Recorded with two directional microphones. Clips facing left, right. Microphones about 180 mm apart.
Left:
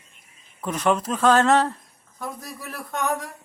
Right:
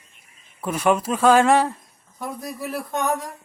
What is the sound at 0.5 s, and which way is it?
Speech, 10° right (ahead or behind).